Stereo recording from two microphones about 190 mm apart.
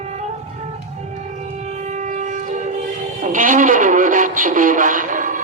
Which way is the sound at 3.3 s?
45° right (ahead or behind).